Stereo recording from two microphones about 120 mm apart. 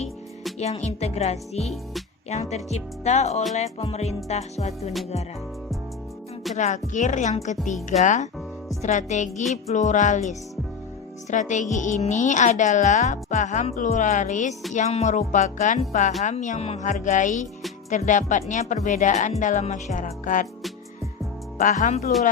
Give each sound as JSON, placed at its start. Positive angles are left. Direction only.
{"t": 0.6, "sound": "music", "side_deg": 65}
{"t": 2.3, "sound": "speech", "side_deg": 70}
{"t": 3.5, "sound": "music", "side_deg": 65}
{"t": 6.6, "sound": "speech", "side_deg": 90}
{"t": 14.7, "sound": "speech", "side_deg": 80}
{"t": 21.6, "sound": "speech", "side_deg": 90}